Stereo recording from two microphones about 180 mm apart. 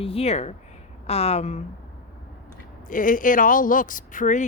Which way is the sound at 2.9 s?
50° left (ahead or behind).